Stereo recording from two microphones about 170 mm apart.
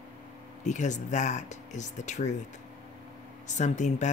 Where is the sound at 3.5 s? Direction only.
45° left (ahead or behind).